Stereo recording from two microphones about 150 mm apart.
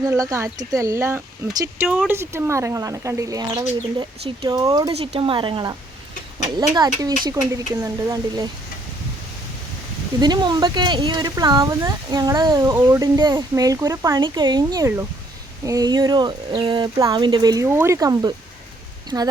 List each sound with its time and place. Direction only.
0.0 s speech: 25° right (ahead or behind)
4.9 s speech: 40° right (ahead or behind); by 8.4 s 20° right (ahead or behind)
10.2 s speech: 30° right (ahead or behind)